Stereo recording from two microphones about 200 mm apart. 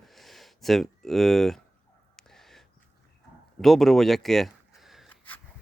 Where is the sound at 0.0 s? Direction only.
Centre (ahead or behind).